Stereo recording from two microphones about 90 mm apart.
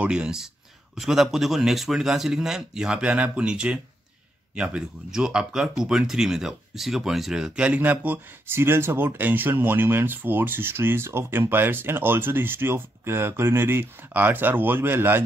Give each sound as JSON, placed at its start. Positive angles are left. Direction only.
{"t": 0.0, "sound": "a man's voice", "side_deg": -10}